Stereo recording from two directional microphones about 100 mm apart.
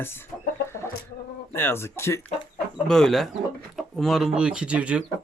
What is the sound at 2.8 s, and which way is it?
Speech, 5° left (ahead or behind).